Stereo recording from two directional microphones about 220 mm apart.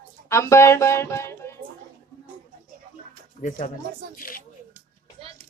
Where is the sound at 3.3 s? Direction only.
35° left (ahead or behind).